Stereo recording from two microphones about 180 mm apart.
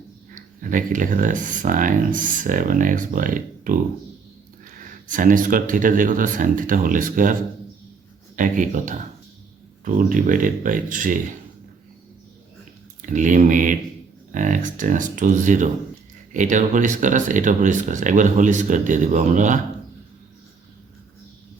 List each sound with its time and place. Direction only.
0.3 s speech: 45° right (ahead or behind)
8.4 s speech: 45° right (ahead or behind)
13.0 s speech: 45° right (ahead or behind)